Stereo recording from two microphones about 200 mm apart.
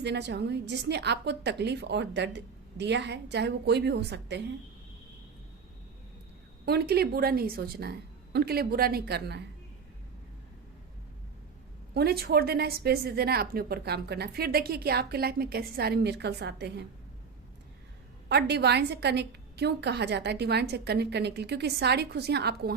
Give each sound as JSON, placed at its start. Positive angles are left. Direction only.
{"t": 0.0, "sound": "a woman's voice", "side_deg": -60}
{"t": 6.7, "sound": "a woman's voice", "side_deg": -55}
{"t": 11.9, "sound": "a woman's voice", "side_deg": -50}
{"t": 18.3, "sound": "a woman's voice", "side_deg": -55}